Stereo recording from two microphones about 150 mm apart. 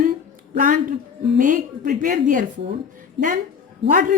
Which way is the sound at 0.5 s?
65° right (ahead or behind).